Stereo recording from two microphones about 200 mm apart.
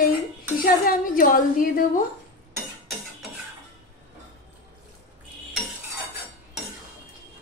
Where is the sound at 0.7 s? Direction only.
45° left (ahead or behind).